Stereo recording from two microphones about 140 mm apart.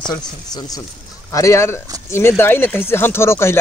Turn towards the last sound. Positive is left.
turn(degrees=20)  # may be behind; listen again after turning